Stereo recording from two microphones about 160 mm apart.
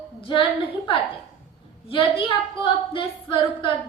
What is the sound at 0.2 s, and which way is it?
Speech, 35° left (ahead or behind).